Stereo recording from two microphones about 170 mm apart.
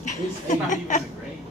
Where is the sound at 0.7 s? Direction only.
45° left (ahead or behind).